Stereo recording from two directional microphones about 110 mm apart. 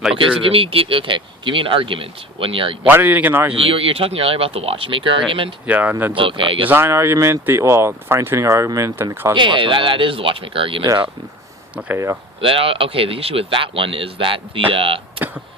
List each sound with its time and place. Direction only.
0.2 s speech: 55° right (ahead or behind)
2.8 s speech: 15° right (ahead or behind)
3.5 s speech: 60° right (ahead or behind)
5.6 s speech: 15° right (ahead or behind)
6.1 s speech: 50° right (ahead or behind)
6.7 s speech: 20° right (ahead or behind)
9.3 s speech: 45° right (ahead or behind)
12.4 s speech: 55° right (ahead or behind)